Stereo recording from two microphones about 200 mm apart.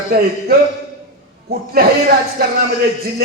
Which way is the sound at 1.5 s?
50° right (ahead or behind).